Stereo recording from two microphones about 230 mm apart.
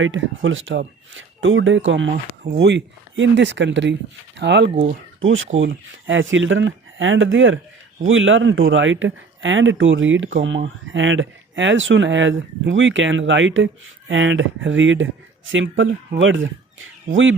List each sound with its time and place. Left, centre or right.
0.0 s speech: right